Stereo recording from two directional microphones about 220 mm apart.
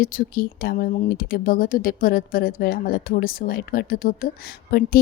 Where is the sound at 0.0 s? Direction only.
40° left (ahead or behind).